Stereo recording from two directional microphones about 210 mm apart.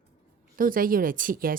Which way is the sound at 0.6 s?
40° right (ahead or behind).